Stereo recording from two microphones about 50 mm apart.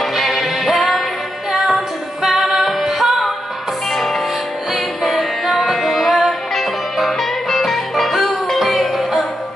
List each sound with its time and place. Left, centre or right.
0.0 s music: centre